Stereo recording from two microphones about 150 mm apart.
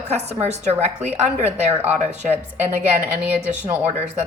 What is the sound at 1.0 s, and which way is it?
A woman's voice, 10° right (ahead or behind).